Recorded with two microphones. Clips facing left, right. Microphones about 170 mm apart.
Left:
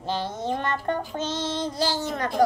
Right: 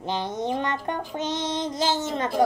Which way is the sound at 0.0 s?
20° right (ahead or behind).